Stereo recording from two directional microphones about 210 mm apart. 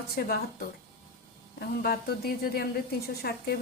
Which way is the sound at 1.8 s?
45° left (ahead or behind).